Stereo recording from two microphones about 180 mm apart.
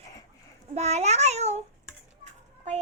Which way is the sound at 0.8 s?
40° right (ahead or behind).